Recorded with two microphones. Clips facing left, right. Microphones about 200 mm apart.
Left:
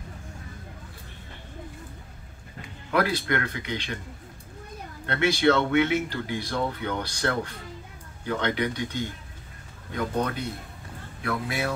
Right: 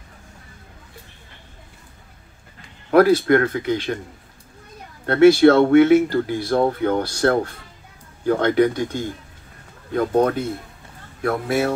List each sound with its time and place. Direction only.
2.9 s speech: 45° right (ahead or behind)
5.0 s speech: 45° right (ahead or behind)